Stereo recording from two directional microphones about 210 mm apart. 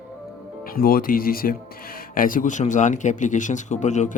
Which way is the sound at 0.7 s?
45° left (ahead or behind).